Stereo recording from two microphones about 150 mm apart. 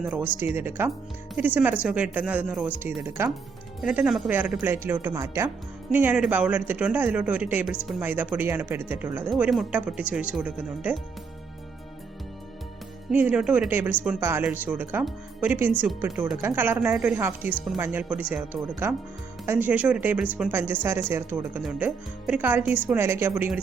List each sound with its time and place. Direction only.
0.0 s speech: 10° right (ahead or behind)
3.2 s speech: 15° right (ahead or behind)
3.8 s speech: 5° right (ahead or behind)
9.3 s speech: centre (ahead or behind)
13.1 s speech: 5° right (ahead or behind)